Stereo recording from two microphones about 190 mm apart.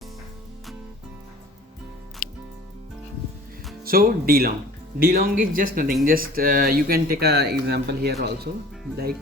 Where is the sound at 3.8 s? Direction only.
50° right (ahead or behind).